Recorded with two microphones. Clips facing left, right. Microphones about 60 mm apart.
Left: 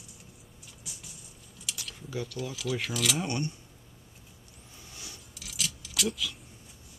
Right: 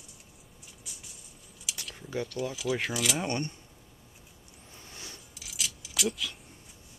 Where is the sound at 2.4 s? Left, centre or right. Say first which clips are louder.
Right 3 dB; centre.